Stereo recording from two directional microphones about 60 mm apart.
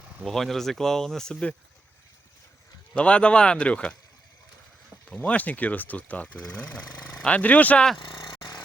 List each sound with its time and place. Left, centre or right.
0.3 s speech: centre
2.9 s speech: centre
5.0 s speech: centre
8.2 s vehicle: left